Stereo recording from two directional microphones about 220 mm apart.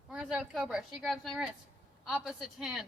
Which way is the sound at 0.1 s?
5° right (ahead or behind).